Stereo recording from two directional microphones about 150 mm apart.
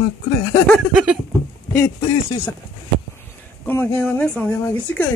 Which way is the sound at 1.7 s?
15° left (ahead or behind).